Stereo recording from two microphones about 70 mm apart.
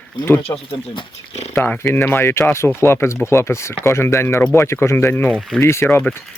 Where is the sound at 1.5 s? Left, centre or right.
Left.